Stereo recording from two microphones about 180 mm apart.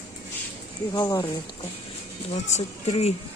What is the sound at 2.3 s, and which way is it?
Speech, 40° left (ahead or behind).